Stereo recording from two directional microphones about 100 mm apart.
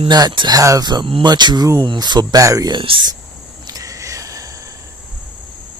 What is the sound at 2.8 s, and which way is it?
Speech, 60° right (ahead or behind).